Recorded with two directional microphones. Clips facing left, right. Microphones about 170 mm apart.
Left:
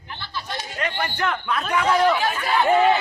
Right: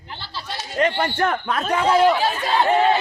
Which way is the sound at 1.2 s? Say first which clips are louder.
Right 2 dB; 40° right (ahead or behind).